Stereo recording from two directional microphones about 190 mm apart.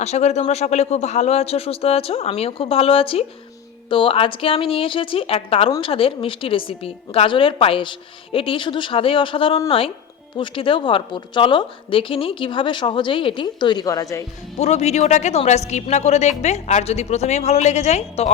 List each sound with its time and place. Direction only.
0.0 s a man's voice: 35° left (ahead or behind); by 14.3 s 15° left (ahead or behind)
14.6 s a man's voice: 35° left (ahead or behind)